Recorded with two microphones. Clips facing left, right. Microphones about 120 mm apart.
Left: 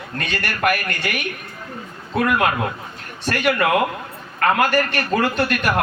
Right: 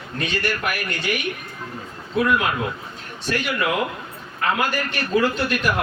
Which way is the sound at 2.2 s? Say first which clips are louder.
Left 2 dB; 60° left (ahead or behind).